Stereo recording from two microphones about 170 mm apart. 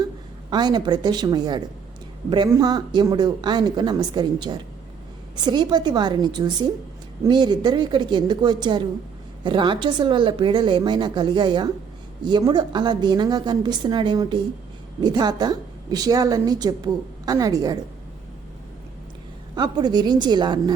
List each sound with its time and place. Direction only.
0.5 s a woman's voice: 25° right (ahead or behind)
19.5 s a woman's voice: 25° right (ahead or behind)